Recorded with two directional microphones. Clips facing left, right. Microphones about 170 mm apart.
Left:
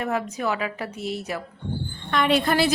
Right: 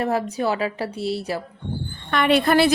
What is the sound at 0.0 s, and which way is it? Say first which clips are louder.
A woman's voice: right 4 dB; 35° right (ahead or behind).